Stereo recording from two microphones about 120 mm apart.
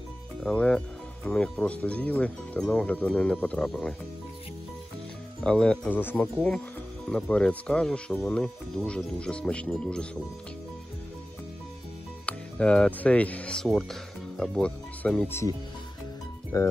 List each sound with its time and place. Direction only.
0.4 s speech: 10° left (ahead or behind)
5.4 s speech: 5° left (ahead or behind)
5.9 s speech: 15° left (ahead or behind)
7.1 s speech: 5° left (ahead or behind)
12.3 s speech: 10° left (ahead or behind)
15.2 s speech: 20° left (ahead or behind)
16.5 s speech: 30° left (ahead or behind)